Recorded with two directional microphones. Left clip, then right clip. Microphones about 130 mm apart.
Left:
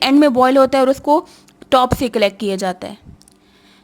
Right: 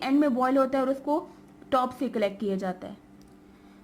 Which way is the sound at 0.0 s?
45° left (ahead or behind).